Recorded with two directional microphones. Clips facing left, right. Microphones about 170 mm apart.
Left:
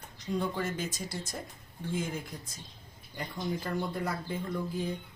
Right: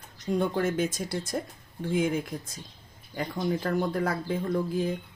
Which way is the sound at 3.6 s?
80° right.